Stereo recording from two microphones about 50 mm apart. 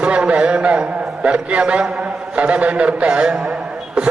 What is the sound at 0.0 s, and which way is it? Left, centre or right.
A man's voice, right.